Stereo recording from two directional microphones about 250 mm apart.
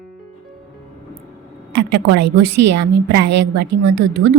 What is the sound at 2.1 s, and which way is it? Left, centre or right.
A woman's voice, right.